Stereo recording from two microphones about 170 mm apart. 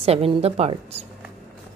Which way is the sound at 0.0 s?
35° right (ahead or behind).